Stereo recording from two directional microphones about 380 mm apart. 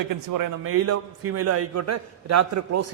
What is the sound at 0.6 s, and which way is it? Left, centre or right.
A man's voice, right.